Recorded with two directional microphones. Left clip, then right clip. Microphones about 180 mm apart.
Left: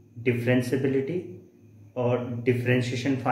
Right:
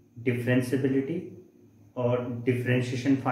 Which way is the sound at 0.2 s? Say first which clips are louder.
Left 2 dB; 35° left (ahead or behind).